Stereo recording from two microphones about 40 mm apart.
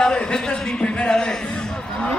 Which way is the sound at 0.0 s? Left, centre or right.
Left.